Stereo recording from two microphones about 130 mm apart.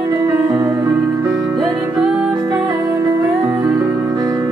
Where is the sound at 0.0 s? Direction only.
20° right (ahead or behind).